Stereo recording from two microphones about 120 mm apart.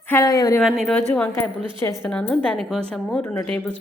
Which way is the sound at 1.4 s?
20° left (ahead or behind).